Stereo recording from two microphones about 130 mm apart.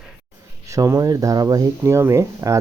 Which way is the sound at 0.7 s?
25° right (ahead or behind).